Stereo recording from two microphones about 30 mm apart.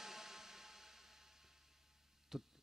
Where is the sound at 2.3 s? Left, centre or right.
Centre.